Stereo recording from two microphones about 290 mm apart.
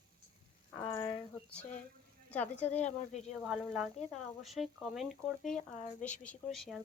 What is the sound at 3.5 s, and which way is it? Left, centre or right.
Speech, centre.